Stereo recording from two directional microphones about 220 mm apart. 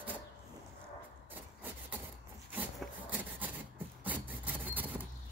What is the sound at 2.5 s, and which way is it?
Wood, 10° right (ahead or behind).